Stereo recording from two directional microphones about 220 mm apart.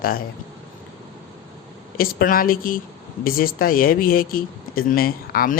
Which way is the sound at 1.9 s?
40° left (ahead or behind).